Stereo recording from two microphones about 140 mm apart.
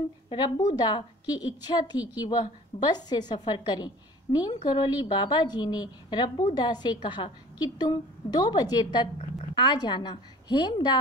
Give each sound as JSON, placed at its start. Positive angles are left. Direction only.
{"t": 0.3, "sound": "a woman's voice", "side_deg": 30}